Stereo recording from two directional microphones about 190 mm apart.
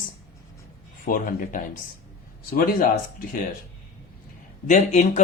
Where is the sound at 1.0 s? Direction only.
50° left (ahead or behind).